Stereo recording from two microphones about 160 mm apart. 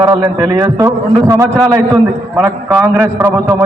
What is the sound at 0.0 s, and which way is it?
A man's voice, 25° right (ahead or behind).